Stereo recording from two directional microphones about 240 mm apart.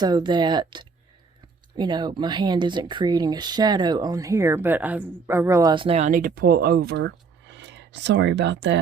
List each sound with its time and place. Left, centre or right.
0.0 s speech: centre; by 8.8 s right